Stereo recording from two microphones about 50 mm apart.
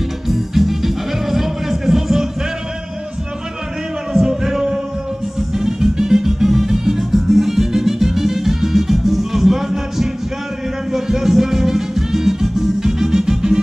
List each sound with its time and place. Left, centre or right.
0.3 s music: centre
4.1 s music: centre